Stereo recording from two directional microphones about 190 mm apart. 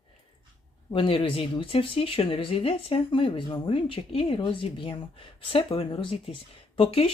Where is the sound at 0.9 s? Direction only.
30° left (ahead or behind).